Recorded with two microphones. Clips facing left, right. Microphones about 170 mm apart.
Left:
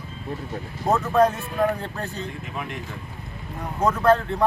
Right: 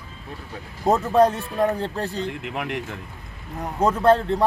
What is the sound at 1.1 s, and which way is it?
Speech, 30° right (ahead or behind).